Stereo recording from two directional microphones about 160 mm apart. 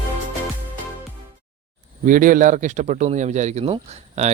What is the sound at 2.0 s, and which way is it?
Speech, 55° right (ahead or behind).